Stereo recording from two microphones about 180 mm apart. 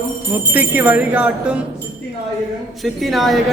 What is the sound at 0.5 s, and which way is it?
Speech, 10° right (ahead or behind).